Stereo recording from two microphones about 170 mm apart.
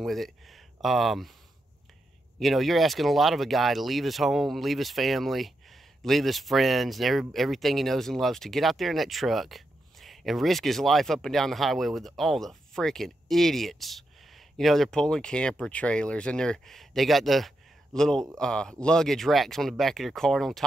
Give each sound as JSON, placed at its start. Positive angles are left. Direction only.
{"t": 0.0, "sound": "speech", "side_deg": 0}
{"t": 2.3, "sound": "speech", "side_deg": 0}